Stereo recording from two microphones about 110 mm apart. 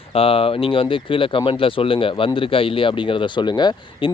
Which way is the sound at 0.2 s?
60° left (ahead or behind).